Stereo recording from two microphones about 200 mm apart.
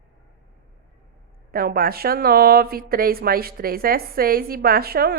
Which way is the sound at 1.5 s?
50° right (ahead or behind).